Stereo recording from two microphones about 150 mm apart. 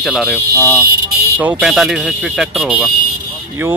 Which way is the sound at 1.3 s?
10° right (ahead or behind).